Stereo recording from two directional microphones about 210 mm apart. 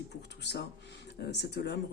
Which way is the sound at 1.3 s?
55° left (ahead or behind).